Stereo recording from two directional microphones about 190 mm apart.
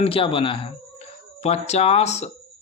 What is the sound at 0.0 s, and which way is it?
Speech, 30° left (ahead or behind).